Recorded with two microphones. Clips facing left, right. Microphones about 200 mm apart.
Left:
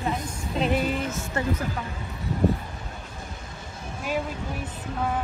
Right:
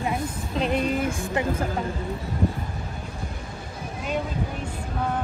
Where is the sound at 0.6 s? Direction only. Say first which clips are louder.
Even; centre (ahead or behind).